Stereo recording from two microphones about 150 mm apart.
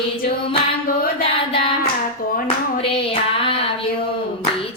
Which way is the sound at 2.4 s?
35° left (ahead or behind).